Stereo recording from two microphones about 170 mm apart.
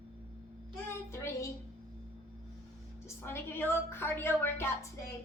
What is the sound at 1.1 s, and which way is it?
Child singing, 15° left (ahead or behind).